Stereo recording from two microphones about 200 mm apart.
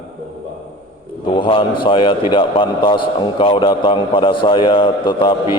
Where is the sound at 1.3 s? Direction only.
25° left (ahead or behind).